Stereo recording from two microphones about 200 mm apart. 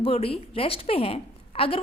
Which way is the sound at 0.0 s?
30° left (ahead or behind).